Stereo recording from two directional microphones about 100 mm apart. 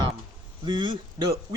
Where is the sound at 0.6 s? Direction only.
50° right (ahead or behind).